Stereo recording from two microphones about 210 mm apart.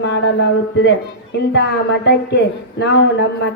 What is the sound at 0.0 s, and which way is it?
Speech, 55° left (ahead or behind).